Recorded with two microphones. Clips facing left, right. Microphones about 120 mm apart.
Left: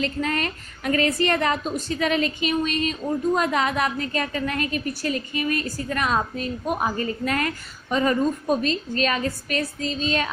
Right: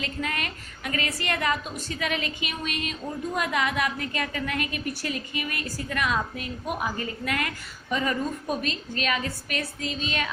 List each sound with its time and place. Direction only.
0.0 s a woman's voice: 35° left (ahead or behind)